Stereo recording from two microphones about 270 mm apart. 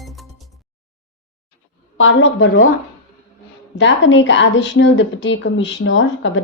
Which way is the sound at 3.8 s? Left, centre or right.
Left.